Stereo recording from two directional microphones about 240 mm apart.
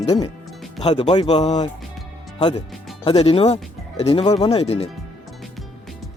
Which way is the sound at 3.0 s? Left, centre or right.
Left.